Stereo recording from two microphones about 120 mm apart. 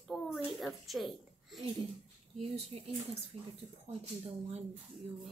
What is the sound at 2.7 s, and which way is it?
Speech, 60° right (ahead or behind).